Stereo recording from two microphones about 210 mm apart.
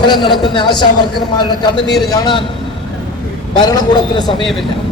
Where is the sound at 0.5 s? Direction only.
20° left (ahead or behind).